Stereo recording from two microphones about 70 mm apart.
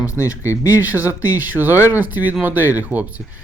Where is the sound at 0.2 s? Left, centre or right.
Left.